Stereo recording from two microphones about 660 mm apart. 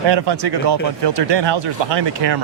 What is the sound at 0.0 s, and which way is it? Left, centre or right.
Speech, right.